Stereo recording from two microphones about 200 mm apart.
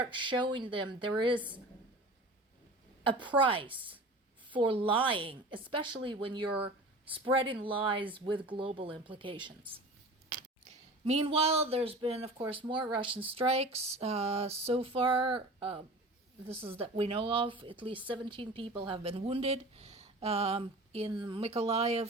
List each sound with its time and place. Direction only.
0.1 s speech: 25° right (ahead or behind)
3.0 s speech: 25° right (ahead or behind)
11.0 s speech: 30° right (ahead or behind)